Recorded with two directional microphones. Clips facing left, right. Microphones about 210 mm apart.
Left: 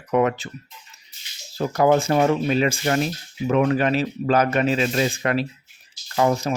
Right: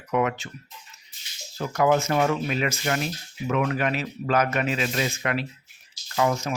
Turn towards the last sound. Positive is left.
turn(degrees=35)  # may be behind; listen again after turning